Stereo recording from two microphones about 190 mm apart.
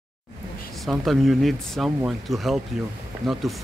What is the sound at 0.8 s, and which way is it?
Speech, centre (ahead or behind).